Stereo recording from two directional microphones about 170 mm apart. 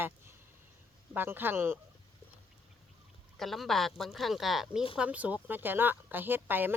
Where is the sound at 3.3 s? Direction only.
Centre (ahead or behind).